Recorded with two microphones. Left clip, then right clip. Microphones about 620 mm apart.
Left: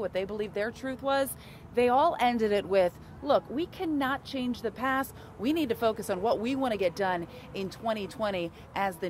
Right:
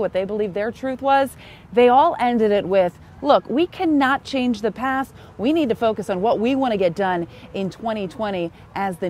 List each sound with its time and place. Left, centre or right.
0.0 s speech: right